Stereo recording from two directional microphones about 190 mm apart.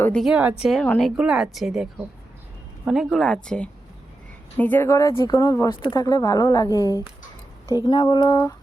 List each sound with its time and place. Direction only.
0.0 s a woman's voice: 5° left (ahead or behind); by 8.5 s 20° left (ahead or behind)